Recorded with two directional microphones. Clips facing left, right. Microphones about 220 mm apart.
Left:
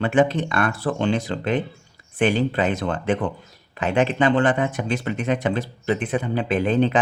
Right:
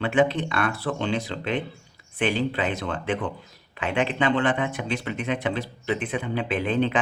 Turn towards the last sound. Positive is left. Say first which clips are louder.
# left 4 dB
turn(degrees=40)  # may be behind; listen again after turning